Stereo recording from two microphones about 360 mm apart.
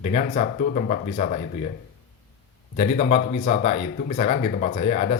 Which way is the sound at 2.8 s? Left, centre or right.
Centre.